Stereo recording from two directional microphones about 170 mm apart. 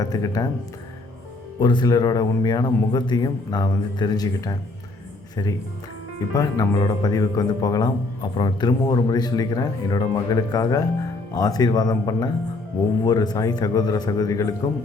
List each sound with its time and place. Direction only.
0.0 s speech: 20° left (ahead or behind)
1.5 s speech: 25° left (ahead or behind)